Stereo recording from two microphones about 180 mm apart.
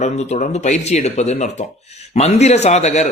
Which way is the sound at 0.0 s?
35° left (ahead or behind).